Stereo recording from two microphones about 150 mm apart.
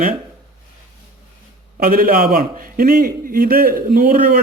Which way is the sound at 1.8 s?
70° right (ahead or behind).